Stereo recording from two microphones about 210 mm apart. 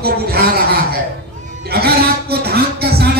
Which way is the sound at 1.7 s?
50° right (ahead or behind).